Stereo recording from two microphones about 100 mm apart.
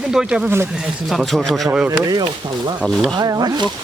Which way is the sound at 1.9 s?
40° right (ahead or behind).